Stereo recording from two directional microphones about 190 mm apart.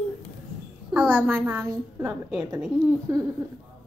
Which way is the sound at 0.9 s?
10° right (ahead or behind).